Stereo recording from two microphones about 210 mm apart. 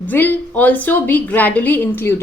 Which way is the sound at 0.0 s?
10° left (ahead or behind).